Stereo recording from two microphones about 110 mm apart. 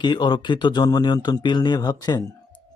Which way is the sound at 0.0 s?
40° left (ahead or behind).